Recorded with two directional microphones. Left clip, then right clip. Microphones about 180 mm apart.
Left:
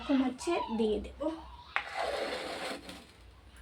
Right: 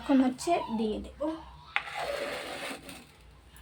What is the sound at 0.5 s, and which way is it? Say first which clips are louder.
Speech: right 4 dB; 35° right (ahead or behind).